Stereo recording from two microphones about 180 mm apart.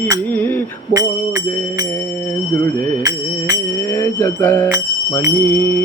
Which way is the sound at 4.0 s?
10° left (ahead or behind).